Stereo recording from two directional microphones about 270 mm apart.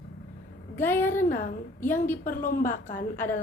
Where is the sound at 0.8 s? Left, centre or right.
Centre.